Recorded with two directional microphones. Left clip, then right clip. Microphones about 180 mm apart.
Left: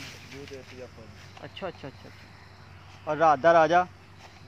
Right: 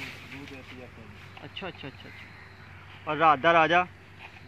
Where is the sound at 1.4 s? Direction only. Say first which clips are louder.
Left 2 dB; 15° left (ahead or behind).